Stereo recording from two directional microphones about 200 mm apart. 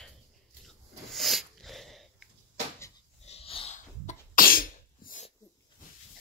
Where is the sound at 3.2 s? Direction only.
30° left (ahead or behind).